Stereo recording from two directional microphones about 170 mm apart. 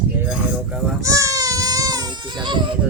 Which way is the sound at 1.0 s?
20° right (ahead or behind).